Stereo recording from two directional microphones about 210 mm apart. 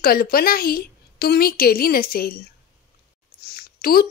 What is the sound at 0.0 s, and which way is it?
Speech, 45° left (ahead or behind).